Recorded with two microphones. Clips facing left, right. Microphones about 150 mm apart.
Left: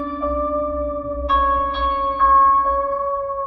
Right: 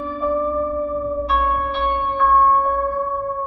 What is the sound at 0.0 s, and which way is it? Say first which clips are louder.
Music: right 1 dB; centre (ahead or behind).